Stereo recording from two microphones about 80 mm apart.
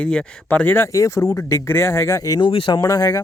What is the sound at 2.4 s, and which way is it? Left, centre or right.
Speech, left.